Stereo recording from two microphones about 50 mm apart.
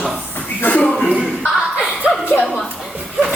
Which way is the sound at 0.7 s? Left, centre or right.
Centre.